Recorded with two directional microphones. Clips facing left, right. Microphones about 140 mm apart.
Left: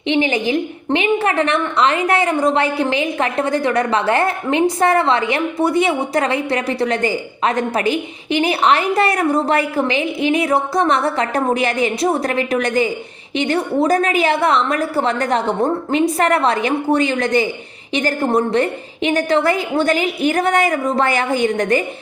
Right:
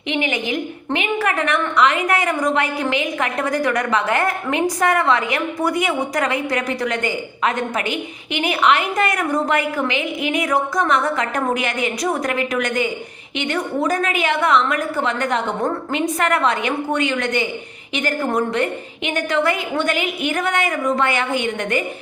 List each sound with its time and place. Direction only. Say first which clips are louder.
0.1 s a woman's voice: left 5 dB; 30° left (ahead or behind)